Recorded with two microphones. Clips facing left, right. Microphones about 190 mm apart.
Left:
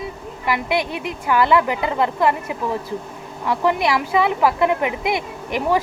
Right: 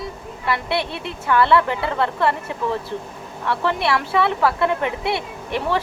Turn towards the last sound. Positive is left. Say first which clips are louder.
# left 3 dB
turn(degrees=15)  # may be behind; listen again after turning